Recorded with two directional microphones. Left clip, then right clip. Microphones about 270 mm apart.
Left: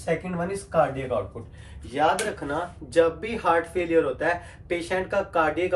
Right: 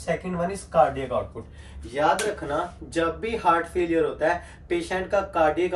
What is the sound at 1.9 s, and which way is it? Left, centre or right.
Speech, centre.